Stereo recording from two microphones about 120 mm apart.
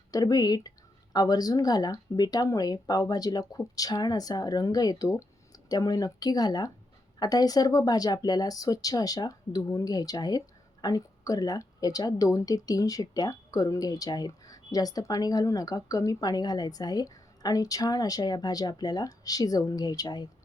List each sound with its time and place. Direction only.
0.1 s speech: 30° left (ahead or behind)